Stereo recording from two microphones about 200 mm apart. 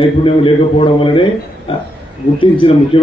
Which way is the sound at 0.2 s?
25° left (ahead or behind).